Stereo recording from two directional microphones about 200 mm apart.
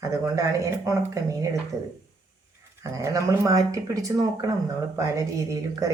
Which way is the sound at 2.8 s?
15° right (ahead or behind).